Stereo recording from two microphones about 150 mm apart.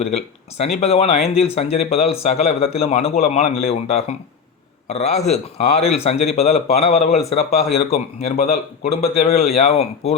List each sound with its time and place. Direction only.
0.0 s a man's voice: 45° left (ahead or behind)